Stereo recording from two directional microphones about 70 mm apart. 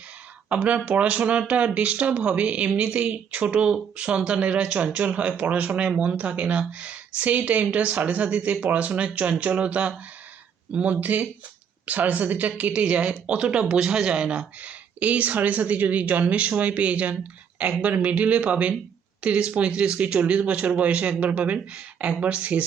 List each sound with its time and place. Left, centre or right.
0.5 s speech: centre